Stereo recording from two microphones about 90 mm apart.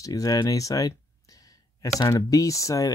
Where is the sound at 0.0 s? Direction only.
40° left (ahead or behind).